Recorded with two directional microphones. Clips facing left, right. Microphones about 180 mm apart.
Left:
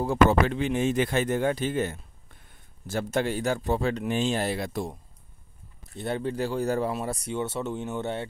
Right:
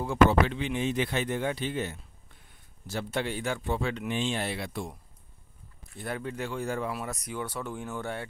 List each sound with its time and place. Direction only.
0.0 s speech: 40° left (ahead or behind)
5.9 s speech: 30° left (ahead or behind)